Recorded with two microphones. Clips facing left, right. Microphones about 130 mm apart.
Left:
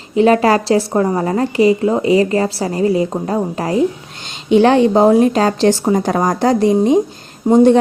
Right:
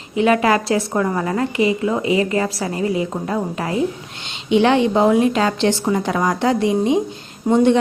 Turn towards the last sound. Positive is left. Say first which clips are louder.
# left 5 dB
turn(degrees=40)  # may be behind; listen again after turning